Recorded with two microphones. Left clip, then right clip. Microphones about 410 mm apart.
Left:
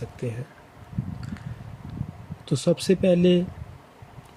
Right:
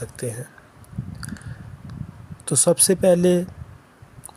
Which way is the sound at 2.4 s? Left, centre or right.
Centre.